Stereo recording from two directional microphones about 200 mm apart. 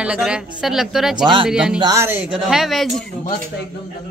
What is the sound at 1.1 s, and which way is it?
Speech, 25° right (ahead or behind).